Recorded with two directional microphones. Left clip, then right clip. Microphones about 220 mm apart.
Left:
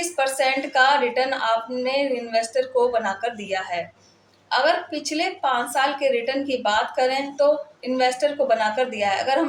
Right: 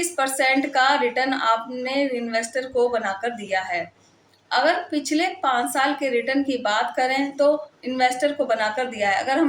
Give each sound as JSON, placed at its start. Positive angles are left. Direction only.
{"t": 0.2, "sound": "a woman's voice", "side_deg": -15}
{"t": 5.1, "sound": "a woman's voice", "side_deg": -15}